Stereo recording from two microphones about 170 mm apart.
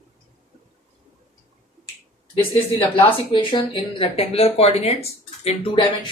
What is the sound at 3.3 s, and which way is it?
Speech, 30° left (ahead or behind).